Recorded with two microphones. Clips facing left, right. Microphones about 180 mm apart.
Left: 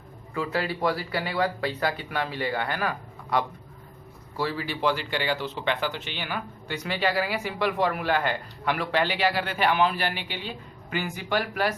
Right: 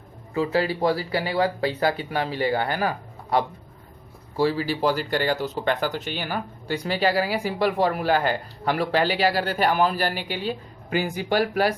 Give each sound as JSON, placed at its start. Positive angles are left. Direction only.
{"t": 0.3, "sound": "speech", "side_deg": -25}